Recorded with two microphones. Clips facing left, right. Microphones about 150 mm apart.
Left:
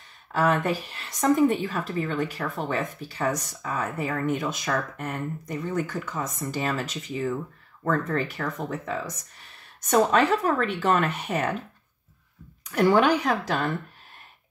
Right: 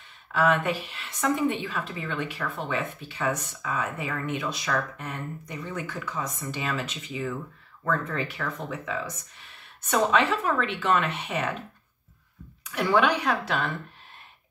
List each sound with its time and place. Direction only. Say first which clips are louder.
0.3 s speech: left 1 dB; 40° left (ahead or behind)
12.6 s speech: left 3 dB; 45° left (ahead or behind)